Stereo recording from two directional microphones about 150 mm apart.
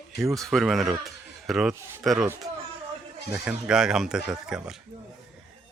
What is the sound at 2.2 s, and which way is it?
Speech, 15° right (ahead or behind).